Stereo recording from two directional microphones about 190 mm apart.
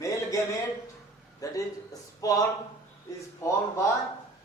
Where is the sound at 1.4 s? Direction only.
15° left (ahead or behind).